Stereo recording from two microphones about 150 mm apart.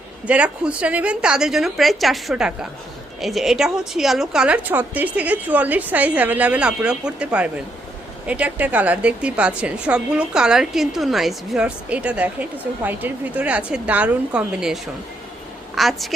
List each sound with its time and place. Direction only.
0.3 s a woman's voice: 10° right (ahead or behind)